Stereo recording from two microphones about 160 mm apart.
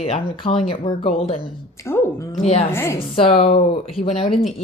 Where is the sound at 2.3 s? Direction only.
40° left (ahead or behind).